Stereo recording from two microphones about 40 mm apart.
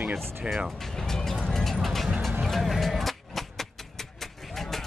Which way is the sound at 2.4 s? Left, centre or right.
Centre.